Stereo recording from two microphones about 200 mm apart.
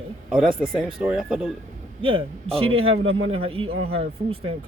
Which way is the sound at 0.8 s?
5° right (ahead or behind).